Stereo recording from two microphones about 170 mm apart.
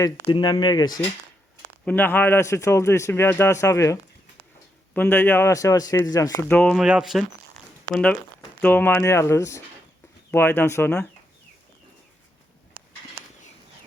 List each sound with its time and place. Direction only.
0.3 s a man's voice: 30° left (ahead or behind)
1.8 s a man's voice: 10° left (ahead or behind)
4.9 s a man's voice: 10° left (ahead or behind)
6.5 s a man's voice: 5° left (ahead or behind)